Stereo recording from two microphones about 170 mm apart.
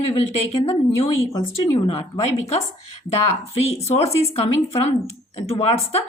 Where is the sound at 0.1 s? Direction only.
35° left (ahead or behind).